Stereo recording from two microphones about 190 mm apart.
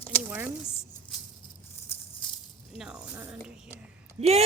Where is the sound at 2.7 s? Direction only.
5° right (ahead or behind).